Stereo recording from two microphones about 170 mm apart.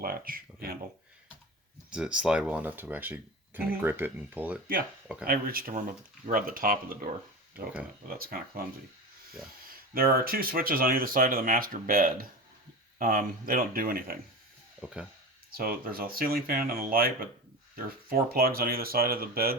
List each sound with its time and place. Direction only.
0.0 s speech: 60° right (ahead or behind)
1.9 s speech: 5° right (ahead or behind)
5.2 s speech: 60° right (ahead or behind)
8.2 s speech: 60° right (ahead or behind)
9.9 s speech: 60° right (ahead or behind)
15.4 s speech: 60° right (ahead or behind)